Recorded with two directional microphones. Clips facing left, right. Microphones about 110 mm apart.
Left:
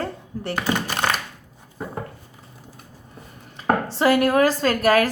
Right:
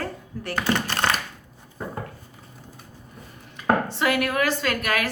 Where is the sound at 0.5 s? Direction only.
10° left (ahead or behind).